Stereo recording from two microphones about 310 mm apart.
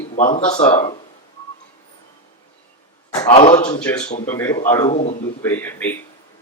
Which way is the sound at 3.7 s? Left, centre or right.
Centre.